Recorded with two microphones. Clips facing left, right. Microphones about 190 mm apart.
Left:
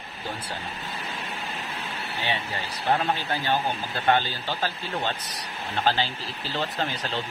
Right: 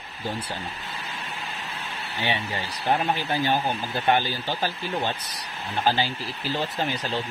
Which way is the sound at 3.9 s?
15° right (ahead or behind).